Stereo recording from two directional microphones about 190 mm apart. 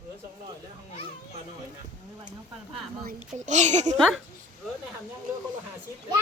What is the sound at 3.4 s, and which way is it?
Speech, 40° right (ahead or behind).